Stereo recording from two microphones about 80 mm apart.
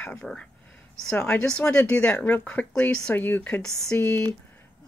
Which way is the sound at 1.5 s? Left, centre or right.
Centre.